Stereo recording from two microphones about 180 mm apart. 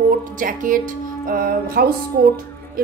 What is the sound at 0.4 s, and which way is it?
Speech, 50° right (ahead or behind).